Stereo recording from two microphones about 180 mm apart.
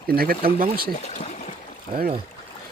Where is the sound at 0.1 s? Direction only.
55° right (ahead or behind).